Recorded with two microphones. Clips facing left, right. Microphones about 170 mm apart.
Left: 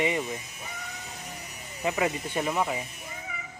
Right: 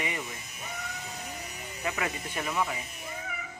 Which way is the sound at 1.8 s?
25° left (ahead or behind).